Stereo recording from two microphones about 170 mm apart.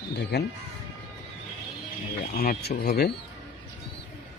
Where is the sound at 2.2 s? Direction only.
55° left (ahead or behind).